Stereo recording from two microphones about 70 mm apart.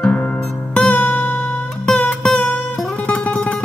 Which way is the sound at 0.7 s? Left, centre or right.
Centre.